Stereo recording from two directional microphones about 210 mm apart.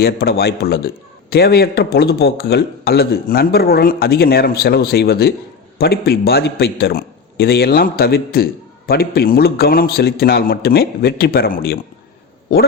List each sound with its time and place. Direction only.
0.0 s a man's voice: 50° left (ahead or behind)